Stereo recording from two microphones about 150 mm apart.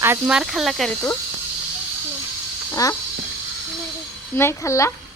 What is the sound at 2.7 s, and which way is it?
Speech, 20° left (ahead or behind).